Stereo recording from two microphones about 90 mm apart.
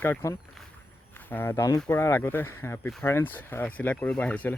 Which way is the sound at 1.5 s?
35° left (ahead or behind).